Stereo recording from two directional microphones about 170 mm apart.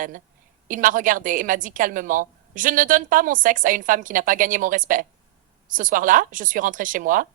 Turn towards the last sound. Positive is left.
turn(degrees=-50)  # may be behind; listen again after turning